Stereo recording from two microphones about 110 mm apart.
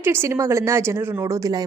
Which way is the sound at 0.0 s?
20° right (ahead or behind).